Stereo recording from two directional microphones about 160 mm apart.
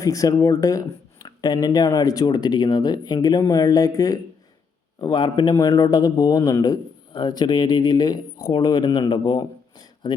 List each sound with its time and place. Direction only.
0.0 s a man's voice: 20° left (ahead or behind)